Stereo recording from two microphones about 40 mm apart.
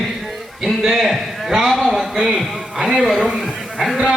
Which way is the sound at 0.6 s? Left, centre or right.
Centre.